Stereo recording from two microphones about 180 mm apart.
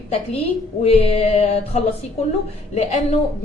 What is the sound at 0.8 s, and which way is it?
A woman's voice, 35° left (ahead or behind).